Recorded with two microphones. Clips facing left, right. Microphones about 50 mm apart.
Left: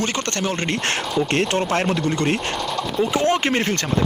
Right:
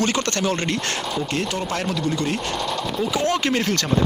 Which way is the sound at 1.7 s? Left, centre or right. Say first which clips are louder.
Left 3 dB; left.